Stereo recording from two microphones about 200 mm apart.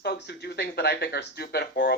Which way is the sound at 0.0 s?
55° left (ahead or behind).